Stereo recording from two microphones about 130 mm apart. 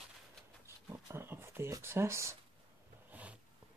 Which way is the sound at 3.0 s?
10° right (ahead or behind).